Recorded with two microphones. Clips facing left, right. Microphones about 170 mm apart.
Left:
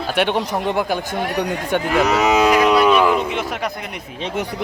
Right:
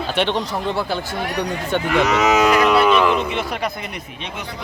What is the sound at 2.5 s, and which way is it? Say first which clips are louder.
Speech: left 1 dB; 10° left (ahead or behind).